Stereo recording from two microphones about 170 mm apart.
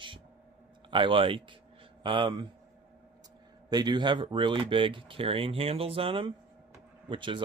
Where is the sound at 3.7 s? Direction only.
25° right (ahead or behind).